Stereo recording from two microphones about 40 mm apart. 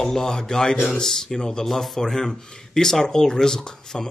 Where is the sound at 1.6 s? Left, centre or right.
Centre.